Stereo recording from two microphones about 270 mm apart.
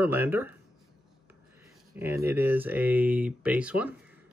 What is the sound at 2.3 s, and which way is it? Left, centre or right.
Speech, centre.